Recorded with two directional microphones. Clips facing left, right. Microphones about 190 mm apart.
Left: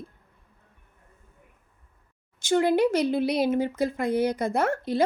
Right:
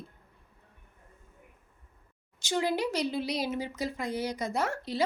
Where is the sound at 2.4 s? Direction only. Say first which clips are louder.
Left 8 dB; 55° left (ahead or behind).